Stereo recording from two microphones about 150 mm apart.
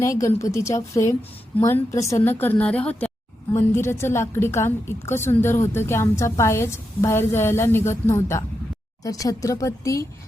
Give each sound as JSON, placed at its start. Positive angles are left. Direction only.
{"t": 0.0, "sound": "a woman's voice", "side_deg": 20}